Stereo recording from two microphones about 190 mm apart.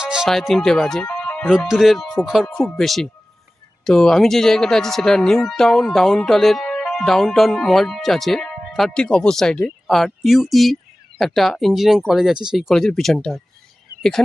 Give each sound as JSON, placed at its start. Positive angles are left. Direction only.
{"t": 0.0, "sound": "speech", "side_deg": -5}